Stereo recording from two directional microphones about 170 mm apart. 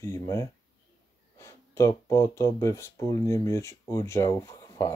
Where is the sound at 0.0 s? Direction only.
15° left (ahead or behind).